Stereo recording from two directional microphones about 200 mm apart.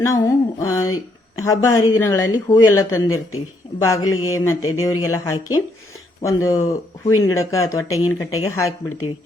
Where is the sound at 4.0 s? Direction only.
90° left.